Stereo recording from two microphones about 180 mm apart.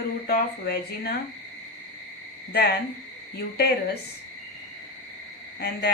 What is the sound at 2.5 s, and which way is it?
Speech, 60° left (ahead or behind).